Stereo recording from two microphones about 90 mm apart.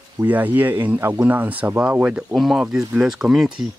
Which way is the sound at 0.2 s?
20° right (ahead or behind).